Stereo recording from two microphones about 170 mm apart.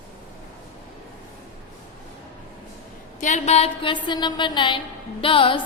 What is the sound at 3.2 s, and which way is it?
A woman's voice, 45° left (ahead or behind).